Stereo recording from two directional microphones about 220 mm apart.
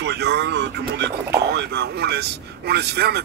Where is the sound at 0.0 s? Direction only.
50° right (ahead or behind).